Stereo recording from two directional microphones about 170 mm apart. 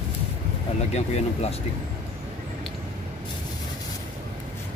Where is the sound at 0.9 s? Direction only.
40° left (ahead or behind).